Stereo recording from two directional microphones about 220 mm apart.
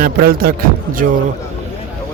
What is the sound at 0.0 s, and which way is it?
Speech, 45° right (ahead or behind).